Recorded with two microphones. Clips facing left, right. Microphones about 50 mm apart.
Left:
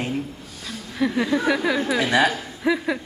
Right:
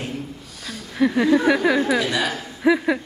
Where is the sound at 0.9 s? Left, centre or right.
Centre.